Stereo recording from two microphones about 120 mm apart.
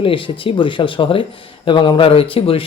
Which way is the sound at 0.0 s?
45° left (ahead or behind).